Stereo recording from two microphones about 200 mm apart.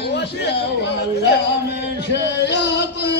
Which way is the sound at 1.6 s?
60° left (ahead or behind).